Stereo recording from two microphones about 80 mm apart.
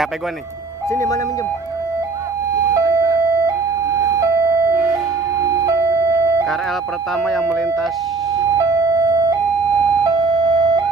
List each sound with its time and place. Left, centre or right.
0.9 s speech: left
2.7 s a sound: right
4.0 s emergency vehicle: right
7.2 s speech: centre
8.5 s a sound: right
10.0 s siren: right